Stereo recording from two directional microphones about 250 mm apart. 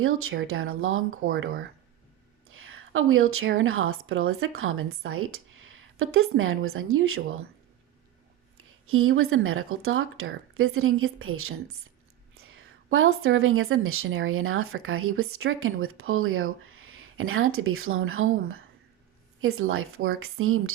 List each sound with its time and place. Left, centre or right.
0.0 s a woman's voice: right
2.5 s a sound: right
3.6 s a woman's voice: right
8.9 s a woman's voice: right